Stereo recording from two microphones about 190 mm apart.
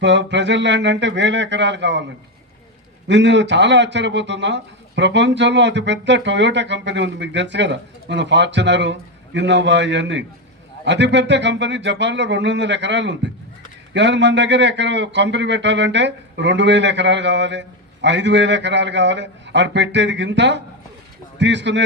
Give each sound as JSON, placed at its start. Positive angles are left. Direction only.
{"t": 0.0, "sound": "a man's voice", "side_deg": -70}
{"t": 3.1, "sound": "a man's voice", "side_deg": -70}